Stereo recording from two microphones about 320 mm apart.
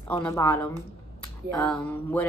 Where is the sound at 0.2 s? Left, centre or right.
Centre.